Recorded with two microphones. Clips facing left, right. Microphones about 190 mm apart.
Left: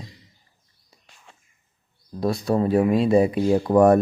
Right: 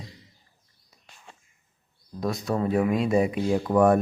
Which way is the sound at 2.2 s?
30° left (ahead or behind).